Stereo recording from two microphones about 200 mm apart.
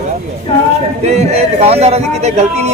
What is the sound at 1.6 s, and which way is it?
Speech, 30° right (ahead or behind).